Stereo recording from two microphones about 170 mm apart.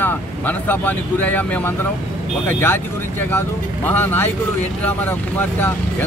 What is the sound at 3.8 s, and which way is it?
Speech, 15° left (ahead or behind).